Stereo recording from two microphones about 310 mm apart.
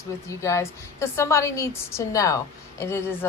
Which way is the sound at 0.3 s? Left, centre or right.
Centre.